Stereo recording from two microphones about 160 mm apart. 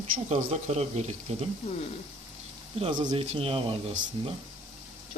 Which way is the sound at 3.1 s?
35° right (ahead or behind).